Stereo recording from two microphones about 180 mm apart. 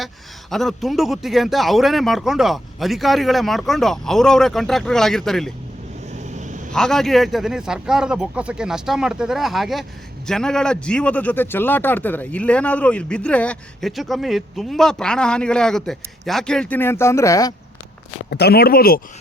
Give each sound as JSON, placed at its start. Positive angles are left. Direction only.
{"t": 0.5, "sound": "speech", "side_deg": 0}
{"t": 6.1, "sound": "dog", "side_deg": -40}
{"t": 6.7, "sound": "a man's voice", "side_deg": 5}
{"t": 18.3, "sound": "speech", "side_deg": 65}